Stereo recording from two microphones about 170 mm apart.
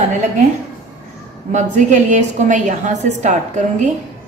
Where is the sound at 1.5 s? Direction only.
45° right (ahead or behind).